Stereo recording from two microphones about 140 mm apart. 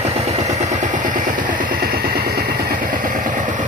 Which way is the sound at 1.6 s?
85° right.